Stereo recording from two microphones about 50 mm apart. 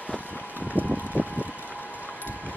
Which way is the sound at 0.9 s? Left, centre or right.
Left.